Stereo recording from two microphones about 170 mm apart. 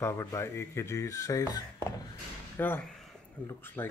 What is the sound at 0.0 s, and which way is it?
Speech, 15° left (ahead or behind).